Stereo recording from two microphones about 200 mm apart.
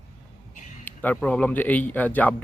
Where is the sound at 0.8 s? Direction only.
10° left (ahead or behind).